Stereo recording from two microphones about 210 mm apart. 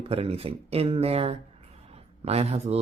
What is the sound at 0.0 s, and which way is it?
Speech, 25° right (ahead or behind).